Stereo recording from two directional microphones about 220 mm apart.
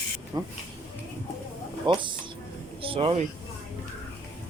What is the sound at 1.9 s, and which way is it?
Speech, 20° right (ahead or behind).